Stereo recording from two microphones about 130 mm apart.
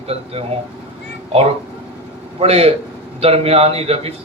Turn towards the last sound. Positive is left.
turn(degrees=-50)  # may be behind; listen again after turning